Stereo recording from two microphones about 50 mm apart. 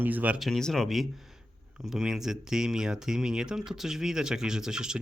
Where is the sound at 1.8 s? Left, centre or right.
Centre.